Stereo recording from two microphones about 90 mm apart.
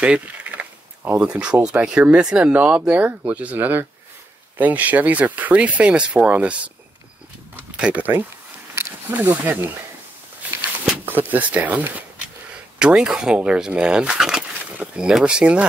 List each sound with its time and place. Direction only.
0.0 s mechanisms: 10° right (ahead or behind)
1.2 s speech: 10° right (ahead or behind)
7.5 s a sound: 15° right (ahead or behind)
8.7 s wild animals: 20° right (ahead or behind)
10.9 s speech: 20° right (ahead or behind)